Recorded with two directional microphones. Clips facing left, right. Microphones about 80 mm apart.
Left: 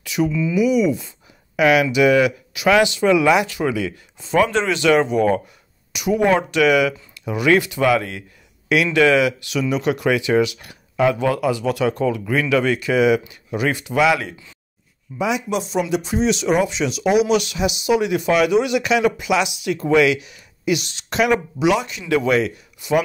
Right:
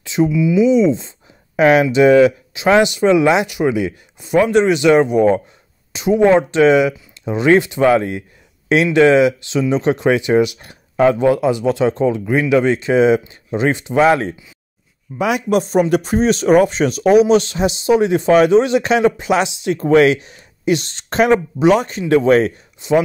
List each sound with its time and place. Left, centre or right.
0.0 s a sound: right
0.3 s speech: centre
0.6 s speech: right
15.1 s speech: right
22.8 s speech: right